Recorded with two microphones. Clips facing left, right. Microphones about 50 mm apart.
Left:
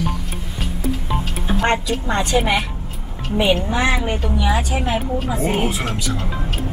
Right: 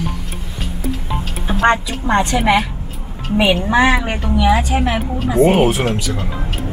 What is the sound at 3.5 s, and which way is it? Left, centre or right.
Speech, right.